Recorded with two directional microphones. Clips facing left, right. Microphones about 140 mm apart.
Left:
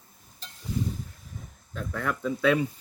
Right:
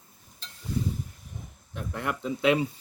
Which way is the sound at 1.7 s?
15° right (ahead or behind).